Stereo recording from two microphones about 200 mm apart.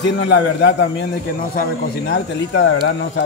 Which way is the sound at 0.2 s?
60° left (ahead or behind).